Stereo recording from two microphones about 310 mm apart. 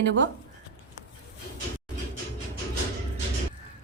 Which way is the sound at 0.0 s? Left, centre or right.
Right.